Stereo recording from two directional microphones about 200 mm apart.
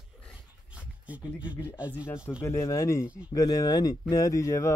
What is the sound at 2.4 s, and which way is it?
Speech, 15° left (ahead or behind).